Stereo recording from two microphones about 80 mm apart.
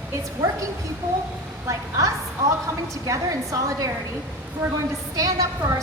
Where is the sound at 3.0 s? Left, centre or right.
Right.